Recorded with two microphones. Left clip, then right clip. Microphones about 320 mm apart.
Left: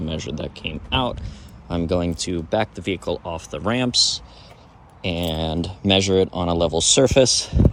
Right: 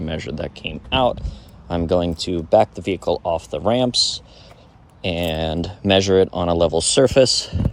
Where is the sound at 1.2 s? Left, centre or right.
Centre.